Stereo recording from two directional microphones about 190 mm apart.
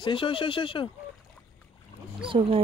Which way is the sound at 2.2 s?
25° right (ahead or behind).